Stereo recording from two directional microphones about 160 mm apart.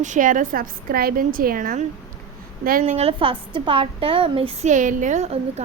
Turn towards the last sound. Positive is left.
turn(degrees=-45)  # may be behind; listen again after turning